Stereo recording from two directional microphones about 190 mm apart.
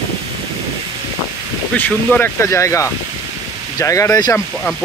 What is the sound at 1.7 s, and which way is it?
Speech, 10° left (ahead or behind).